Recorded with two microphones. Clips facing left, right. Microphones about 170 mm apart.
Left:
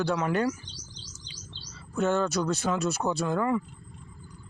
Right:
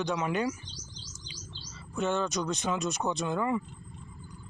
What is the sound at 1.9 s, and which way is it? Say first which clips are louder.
Speech: left 4 dB; 15° right (ahead or behind).